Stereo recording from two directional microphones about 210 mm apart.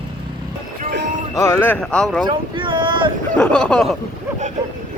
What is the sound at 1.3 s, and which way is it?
Speech, 15° left (ahead or behind).